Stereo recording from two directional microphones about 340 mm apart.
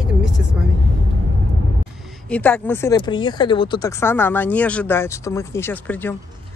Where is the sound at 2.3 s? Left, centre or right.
Centre.